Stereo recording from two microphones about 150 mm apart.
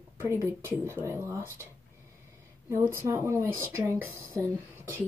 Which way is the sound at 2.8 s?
20° right (ahead or behind).